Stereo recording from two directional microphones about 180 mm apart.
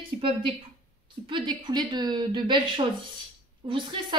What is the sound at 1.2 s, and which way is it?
A woman's voice, 25° right (ahead or behind).